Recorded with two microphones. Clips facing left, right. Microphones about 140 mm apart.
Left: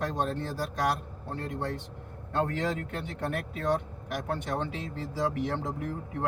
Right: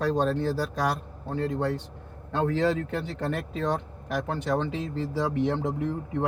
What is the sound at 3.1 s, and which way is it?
Speech, 90° right.